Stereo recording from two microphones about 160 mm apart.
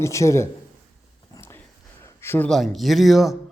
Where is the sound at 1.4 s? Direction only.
15° left (ahead or behind).